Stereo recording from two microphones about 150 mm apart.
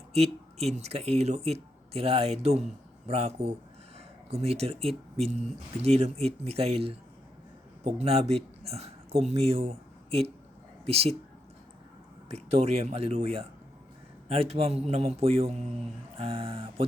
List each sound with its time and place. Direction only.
0.1 s speech: 45° right (ahead or behind)
7.9 s speech: 45° right (ahead or behind)
12.3 s speech: 45° right (ahead or behind)